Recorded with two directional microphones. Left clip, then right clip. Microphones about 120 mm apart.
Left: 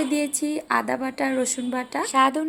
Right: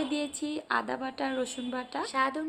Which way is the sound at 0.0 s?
30° left (ahead or behind).